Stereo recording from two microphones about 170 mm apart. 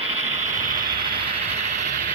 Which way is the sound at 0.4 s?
50° right (ahead or behind).